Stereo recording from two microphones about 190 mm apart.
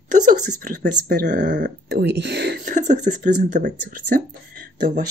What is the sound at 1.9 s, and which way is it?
Speech, 60° right (ahead or behind).